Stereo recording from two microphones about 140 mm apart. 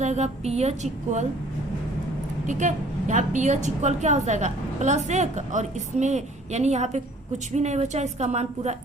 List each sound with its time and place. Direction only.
0.0 s a woman's voice: 55° right (ahead or behind)
2.5 s a woman's voice: 60° right (ahead or behind)